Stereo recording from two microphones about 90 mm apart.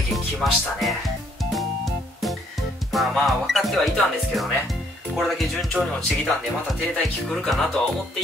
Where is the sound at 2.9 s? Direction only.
Centre (ahead or behind).